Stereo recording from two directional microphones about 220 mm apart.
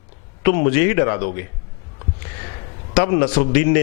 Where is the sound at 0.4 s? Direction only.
15° left (ahead or behind).